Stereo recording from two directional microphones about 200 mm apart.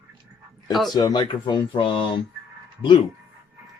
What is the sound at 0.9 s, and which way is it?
Speech, 20° left (ahead or behind).